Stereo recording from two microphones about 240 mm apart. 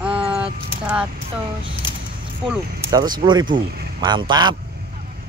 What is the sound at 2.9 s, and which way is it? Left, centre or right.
Speech, centre.